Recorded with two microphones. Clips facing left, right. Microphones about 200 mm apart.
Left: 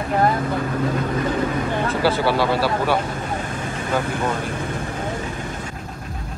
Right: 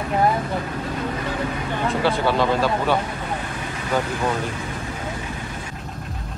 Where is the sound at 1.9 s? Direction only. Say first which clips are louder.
Right 1 dB; 5° left (ahead or behind).